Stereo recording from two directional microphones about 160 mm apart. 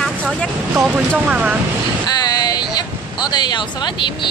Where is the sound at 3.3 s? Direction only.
25° left (ahead or behind).